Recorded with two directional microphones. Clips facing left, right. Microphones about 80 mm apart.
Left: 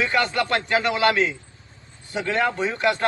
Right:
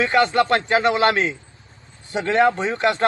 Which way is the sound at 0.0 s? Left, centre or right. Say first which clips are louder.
Right 5 dB; right.